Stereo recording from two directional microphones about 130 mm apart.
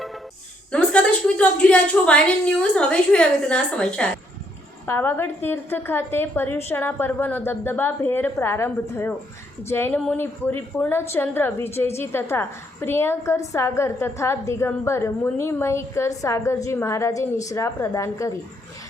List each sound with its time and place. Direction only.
0.7 s a woman's voice: 10° left (ahead or behind); by 18.3 s 25° left (ahead or behind)